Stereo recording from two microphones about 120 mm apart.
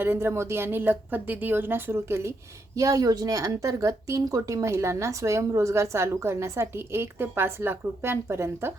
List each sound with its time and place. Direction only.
0.0 s speech: 20° right (ahead or behind)